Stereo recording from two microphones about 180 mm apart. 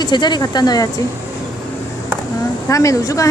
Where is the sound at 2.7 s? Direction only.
20° left (ahead or behind).